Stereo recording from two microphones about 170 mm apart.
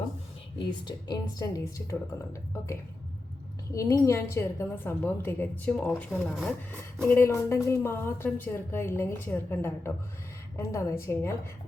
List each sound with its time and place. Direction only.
0.6 s speech: 25° left (ahead or behind)
3.8 s a woman's voice: 20° left (ahead or behind)